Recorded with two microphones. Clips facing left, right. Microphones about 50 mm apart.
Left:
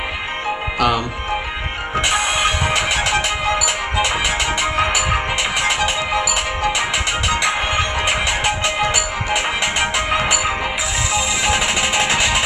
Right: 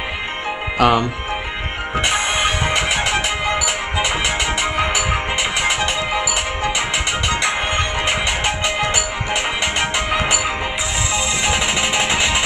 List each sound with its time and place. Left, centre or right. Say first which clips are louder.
0.7 s speech: right 4 dB; right
2.0 s music: left 1 dB; centre